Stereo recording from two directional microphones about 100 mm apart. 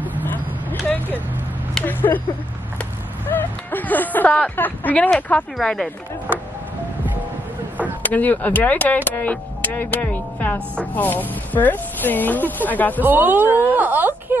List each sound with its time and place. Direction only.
0.7 s vehicle: 20° left (ahead or behind)
1.9 s speech: 20° left (ahead or behind)
2.8 s a sound: 20° left (ahead or behind)
5.1 s speech: 5° left (ahead or behind)
8.0 s speech: 15° left (ahead or behind)
13.0 s speech: 20° right (ahead or behind)